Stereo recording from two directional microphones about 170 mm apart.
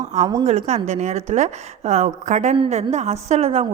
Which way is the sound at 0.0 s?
40° right (ahead or behind).